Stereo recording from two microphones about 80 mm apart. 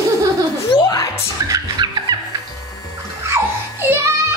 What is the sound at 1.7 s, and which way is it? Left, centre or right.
Music, right.